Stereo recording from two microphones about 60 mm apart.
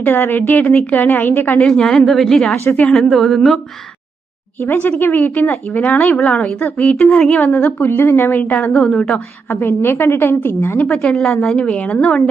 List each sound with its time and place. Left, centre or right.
0.0 s a woman's voice: left
1.6 s a woman's voice: centre
4.6 s a woman's voice: left
9.5 s a woman's voice: left
10.8 s a woman's voice: left
11.0 s a woman's voice: centre